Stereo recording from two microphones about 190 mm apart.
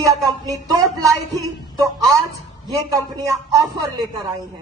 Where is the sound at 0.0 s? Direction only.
20° right (ahead or behind).